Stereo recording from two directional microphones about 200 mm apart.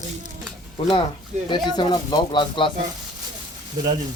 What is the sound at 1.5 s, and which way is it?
Speech, 20° left (ahead or behind).